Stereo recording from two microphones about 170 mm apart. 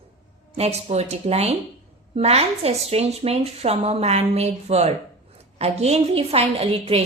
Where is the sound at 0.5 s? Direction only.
40° right (ahead or behind).